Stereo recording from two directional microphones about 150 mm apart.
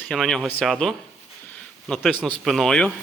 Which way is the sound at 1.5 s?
5° left (ahead or behind).